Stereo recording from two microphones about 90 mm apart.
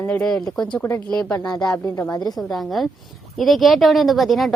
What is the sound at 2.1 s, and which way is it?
Speech, 50° left (ahead or behind).